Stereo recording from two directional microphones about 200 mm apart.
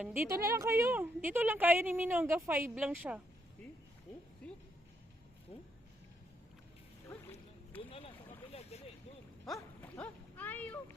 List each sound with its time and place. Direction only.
0.0 s a woman's voice: 10° right (ahead or behind)
4.4 s music: 5° left (ahead or behind)
7.1 s a sound: 10° left (ahead or behind)
7.8 s vehicle: 25° left (ahead or behind)
8.7 s a sound: 30° left (ahead or behind)
9.6 s dog: 10° left (ahead or behind)